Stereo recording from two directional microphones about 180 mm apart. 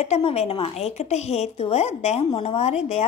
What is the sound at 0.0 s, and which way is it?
A woman's voice, 35° left (ahead or behind).